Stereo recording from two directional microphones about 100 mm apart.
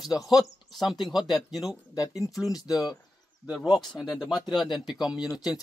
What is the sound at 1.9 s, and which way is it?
Speech, 35° left (ahead or behind).